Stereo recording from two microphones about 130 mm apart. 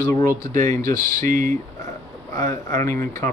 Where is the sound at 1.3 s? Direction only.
90° right.